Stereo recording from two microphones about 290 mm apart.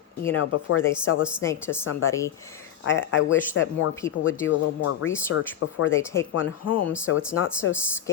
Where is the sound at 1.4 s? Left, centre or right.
Centre.